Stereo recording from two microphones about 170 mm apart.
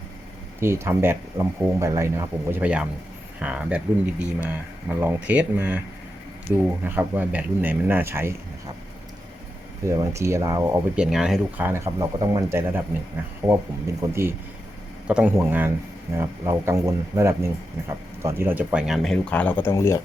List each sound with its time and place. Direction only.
0.6 s speech: 15° right (ahead or behind)
9.8 s speech: 15° right (ahead or behind); by 20.0 s 15° left (ahead or behind)